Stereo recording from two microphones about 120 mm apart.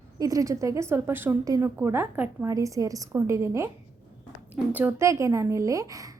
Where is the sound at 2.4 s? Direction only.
25° right (ahead or behind).